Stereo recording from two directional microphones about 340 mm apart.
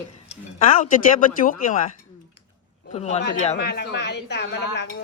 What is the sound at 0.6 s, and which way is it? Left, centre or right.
Speech, left.